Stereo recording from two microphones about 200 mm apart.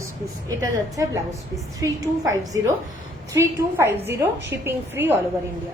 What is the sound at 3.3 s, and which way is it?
A woman's voice, 15° right (ahead or behind).